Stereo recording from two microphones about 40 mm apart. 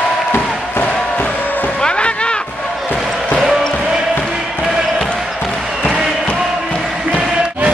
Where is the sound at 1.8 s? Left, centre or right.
Left.